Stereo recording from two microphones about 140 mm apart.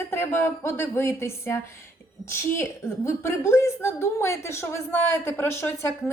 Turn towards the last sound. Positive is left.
turn(degrees=20)  # may be behind; listen again after turning